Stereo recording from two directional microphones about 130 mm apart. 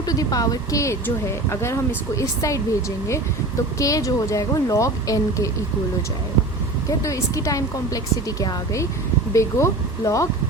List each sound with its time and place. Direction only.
0.0 s speech: 30° left (ahead or behind)
3.8 s speech: 25° left (ahead or behind)
7.0 s speech: 25° left (ahead or behind)